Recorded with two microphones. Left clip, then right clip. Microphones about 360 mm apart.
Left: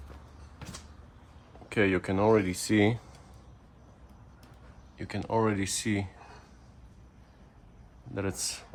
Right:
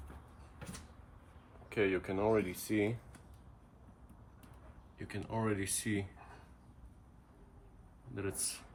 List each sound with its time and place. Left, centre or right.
1.7 s speech: left
4.9 s speech: centre
8.1 s speech: centre